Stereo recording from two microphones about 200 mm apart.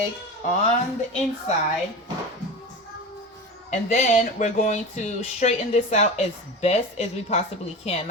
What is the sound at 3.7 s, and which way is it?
A woman's voice, 35° left (ahead or behind).